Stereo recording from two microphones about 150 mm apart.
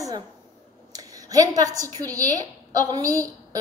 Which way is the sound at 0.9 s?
25° right (ahead or behind).